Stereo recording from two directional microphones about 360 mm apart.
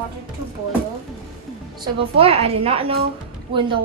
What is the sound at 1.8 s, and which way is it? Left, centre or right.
A woman's voice, centre.